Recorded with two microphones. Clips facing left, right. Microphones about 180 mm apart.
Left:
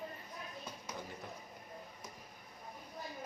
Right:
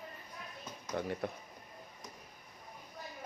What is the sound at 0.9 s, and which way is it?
Speech, 65° right (ahead or behind).